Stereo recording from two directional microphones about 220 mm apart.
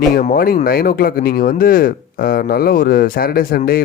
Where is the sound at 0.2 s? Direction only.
40° left (ahead or behind).